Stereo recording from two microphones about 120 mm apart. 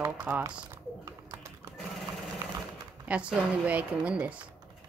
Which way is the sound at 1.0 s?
30° right (ahead or behind).